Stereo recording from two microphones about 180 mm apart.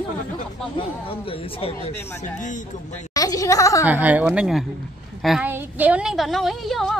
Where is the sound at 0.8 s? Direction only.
30° left (ahead or behind).